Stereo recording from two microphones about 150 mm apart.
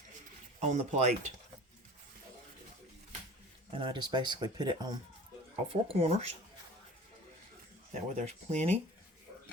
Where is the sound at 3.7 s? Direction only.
35° right (ahead or behind).